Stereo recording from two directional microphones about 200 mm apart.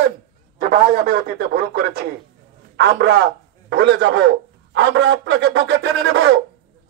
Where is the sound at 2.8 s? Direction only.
60° right (ahead or behind).